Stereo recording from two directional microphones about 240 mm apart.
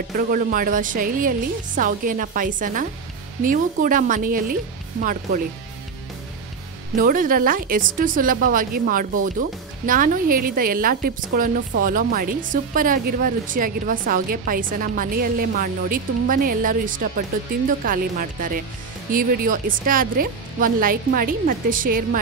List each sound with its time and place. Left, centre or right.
0.3 s speech: right
7.0 s speech: right